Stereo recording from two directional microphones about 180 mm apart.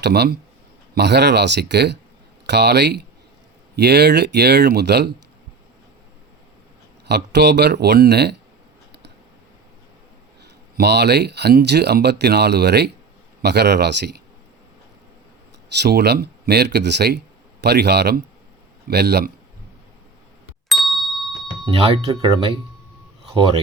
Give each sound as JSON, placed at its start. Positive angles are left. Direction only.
{"t": 0.0, "sound": "speech", "side_deg": -65}
{"t": 7.1, "sound": "speech", "side_deg": -70}
{"t": 10.8, "sound": "speech", "side_deg": -65}
{"t": 15.8, "sound": "speech", "side_deg": -65}
{"t": 20.7, "sound": "ding", "side_deg": 0}
{"t": 21.7, "sound": "speech", "side_deg": -30}